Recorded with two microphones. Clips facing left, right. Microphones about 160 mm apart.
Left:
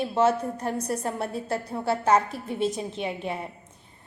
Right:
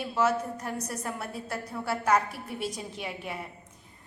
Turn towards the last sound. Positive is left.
turn(degrees=25)  # may be behind; listen again after turning